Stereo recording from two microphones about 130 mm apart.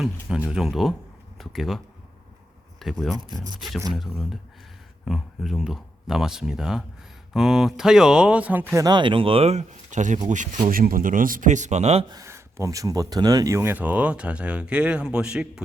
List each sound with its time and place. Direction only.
0.0 s speech: 5° right (ahead or behind)
8.7 s speech: 30° right (ahead or behind); by 12.0 s 55° right (ahead or behind)
12.0 s speech: 25° right (ahead or behind); by 15.6 s 5° right (ahead or behind)